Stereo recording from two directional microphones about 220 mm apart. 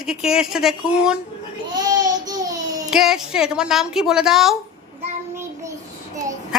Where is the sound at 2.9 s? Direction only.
Centre (ahead or behind).